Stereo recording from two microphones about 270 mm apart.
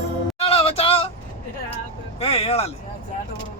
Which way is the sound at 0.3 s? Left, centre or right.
Left.